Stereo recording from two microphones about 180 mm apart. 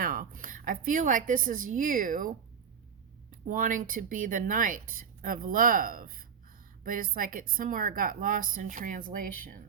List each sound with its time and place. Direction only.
0.0 s a woman's voice: 50° right (ahead or behind)
3.4 s speech: 45° right (ahead or behind)